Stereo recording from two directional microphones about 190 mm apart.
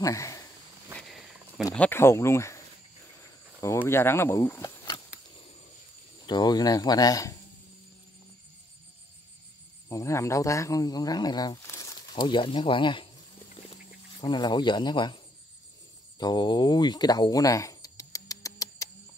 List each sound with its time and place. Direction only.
0.0 s speech: 15° left (ahead or behind)
0.9 s cricket: centre (ahead or behind)
1.6 s speech: 15° left (ahead or behind)
3.6 s speech: 15° left (ahead or behind)
6.2 s speech: 20° left (ahead or behind)
9.8 s speech: 15° left (ahead or behind)
14.2 s speech: 25° left (ahead or behind)
16.2 s a sound: 20° left (ahead or behind)